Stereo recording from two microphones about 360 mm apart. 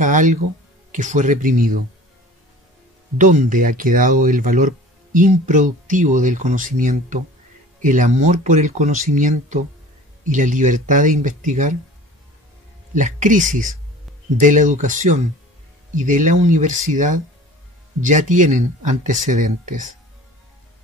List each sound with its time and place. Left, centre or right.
0.0 s speech: right
3.2 s speech: right
12.9 s speech: right